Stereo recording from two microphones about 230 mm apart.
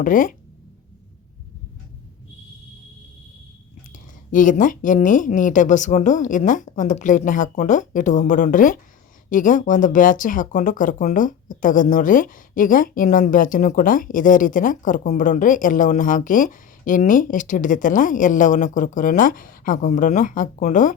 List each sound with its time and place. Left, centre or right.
0.0 s speech: left
3.9 s speech: left